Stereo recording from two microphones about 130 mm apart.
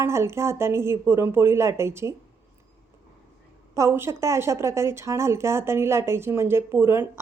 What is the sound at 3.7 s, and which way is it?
A woman's voice, 20° right (ahead or behind).